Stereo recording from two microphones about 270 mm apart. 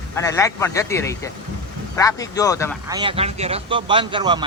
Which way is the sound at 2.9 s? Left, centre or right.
Centre.